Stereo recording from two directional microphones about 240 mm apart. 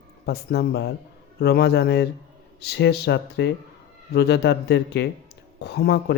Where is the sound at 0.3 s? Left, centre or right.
Left.